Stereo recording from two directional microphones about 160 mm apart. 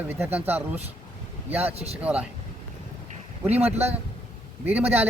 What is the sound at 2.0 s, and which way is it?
Speech, 5° right (ahead or behind).